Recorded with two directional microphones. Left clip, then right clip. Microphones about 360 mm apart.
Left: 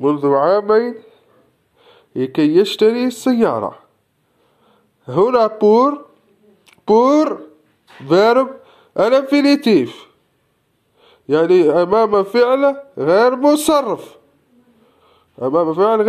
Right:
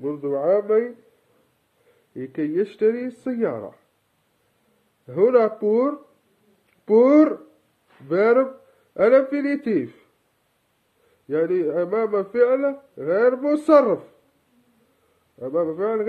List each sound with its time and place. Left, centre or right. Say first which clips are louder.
0.0 s speech: left 12 dB; centre
2.1 s speech: left 10 dB; centre
5.0 s speech: left 4 dB; centre
11.2 s speech: left 10 dB; centre
15.3 s speech: left 8 dB; centre